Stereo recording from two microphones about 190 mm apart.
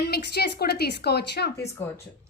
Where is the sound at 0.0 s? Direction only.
60° left (ahead or behind).